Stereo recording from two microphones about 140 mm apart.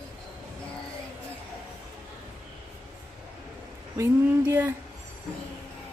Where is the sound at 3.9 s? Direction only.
15° right (ahead or behind).